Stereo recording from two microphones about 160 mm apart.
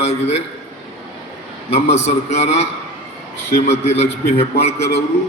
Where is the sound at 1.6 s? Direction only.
40° left (ahead or behind).